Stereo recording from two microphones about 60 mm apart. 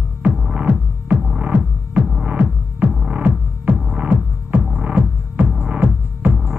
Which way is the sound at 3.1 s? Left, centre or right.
Right.